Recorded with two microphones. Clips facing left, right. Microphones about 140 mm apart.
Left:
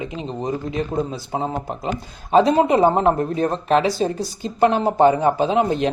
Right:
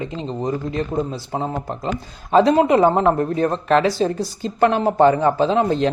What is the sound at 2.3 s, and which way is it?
Speech, 20° left (ahead or behind).